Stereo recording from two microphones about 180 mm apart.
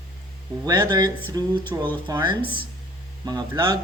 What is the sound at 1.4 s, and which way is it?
Speech, 20° right (ahead or behind).